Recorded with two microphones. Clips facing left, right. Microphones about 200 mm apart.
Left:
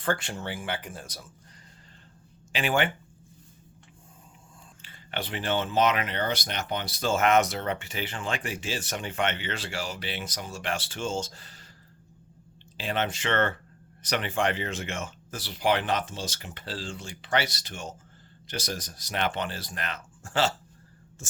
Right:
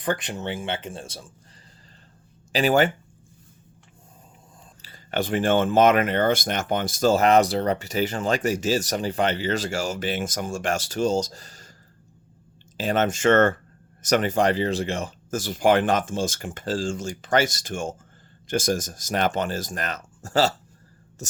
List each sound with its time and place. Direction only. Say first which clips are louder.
0.0 s speech: right 3 dB; 20° right (ahead or behind)
2.5 s speech: right 7 dB; 40° right (ahead or behind)
4.8 s speech: right 9 dB; 40° right (ahead or behind)
12.7 s speech: right 7 dB; 45° right (ahead or behind)